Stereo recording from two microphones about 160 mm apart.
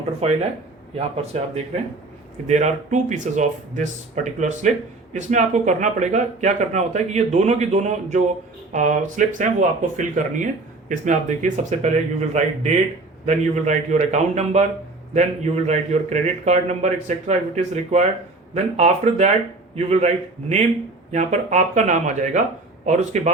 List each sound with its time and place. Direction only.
0.2 s a man's voice: 40° right (ahead or behind)
21.1 s a man's voice: 45° right (ahead or behind)